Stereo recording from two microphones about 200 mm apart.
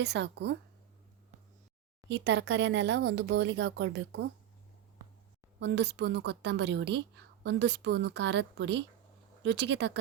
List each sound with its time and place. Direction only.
0.0 s speech: 60° right (ahead or behind)
2.0 s speech: 60° right (ahead or behind)
5.5 s speech: 60° right (ahead or behind)